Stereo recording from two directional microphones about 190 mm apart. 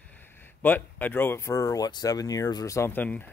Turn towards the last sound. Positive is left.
turn(degrees=10)  # may be behind; listen again after turning